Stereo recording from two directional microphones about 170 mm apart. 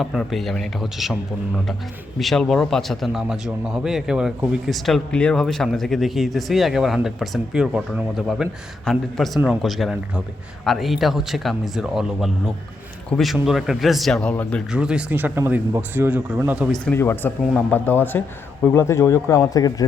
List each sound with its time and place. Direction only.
0.0 s speech: centre (ahead or behind)
2.1 s speech: centre (ahead or behind)
14.7 s speech: 5° right (ahead or behind)
16.8 s speech: 15° left (ahead or behind)